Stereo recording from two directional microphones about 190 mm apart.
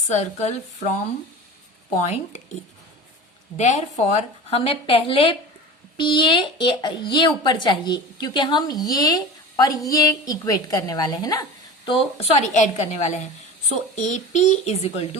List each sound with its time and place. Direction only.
0.1 s a woman's voice: 35° left (ahead or behind)
2.0 s a woman's voice: 40° left (ahead or behind)
3.6 s a woman's voice: 40° left (ahead or behind); by 11.4 s 20° left (ahead or behind)
11.9 s a woman's voice: 30° left (ahead or behind)